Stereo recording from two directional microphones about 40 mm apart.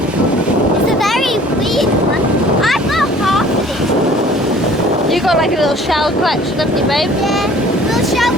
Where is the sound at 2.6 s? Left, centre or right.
Centre.